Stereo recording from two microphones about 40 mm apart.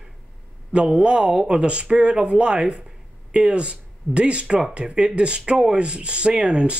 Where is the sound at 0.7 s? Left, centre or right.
Right.